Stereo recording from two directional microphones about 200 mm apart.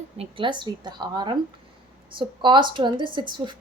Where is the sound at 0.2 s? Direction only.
25° right (ahead or behind).